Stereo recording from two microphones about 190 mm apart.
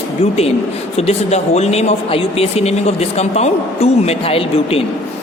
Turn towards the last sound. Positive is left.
turn(degrees=30)  # may be behind; listen again after turning